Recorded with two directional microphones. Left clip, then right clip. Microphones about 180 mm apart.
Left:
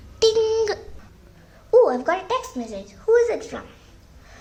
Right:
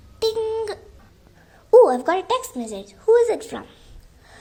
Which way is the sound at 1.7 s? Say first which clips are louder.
Right 3 dB; 40° right (ahead or behind).